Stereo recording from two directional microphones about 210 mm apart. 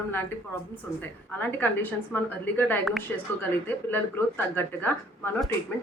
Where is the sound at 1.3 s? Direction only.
10° left (ahead or behind).